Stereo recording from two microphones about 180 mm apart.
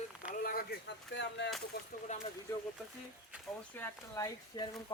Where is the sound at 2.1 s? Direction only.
40° left (ahead or behind).